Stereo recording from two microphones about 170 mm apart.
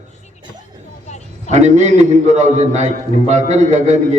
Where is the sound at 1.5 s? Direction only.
40° right (ahead or behind).